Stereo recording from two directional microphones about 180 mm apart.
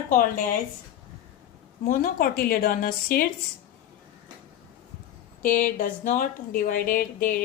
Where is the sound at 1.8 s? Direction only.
55° left (ahead or behind).